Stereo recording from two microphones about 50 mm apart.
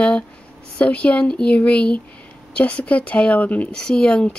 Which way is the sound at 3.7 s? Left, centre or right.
Centre.